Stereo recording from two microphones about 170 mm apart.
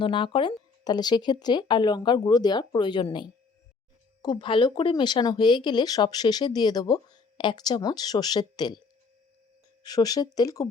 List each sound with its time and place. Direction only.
0.0 s speech: 30° left (ahead or behind)
9.8 s speech: 25° left (ahead or behind)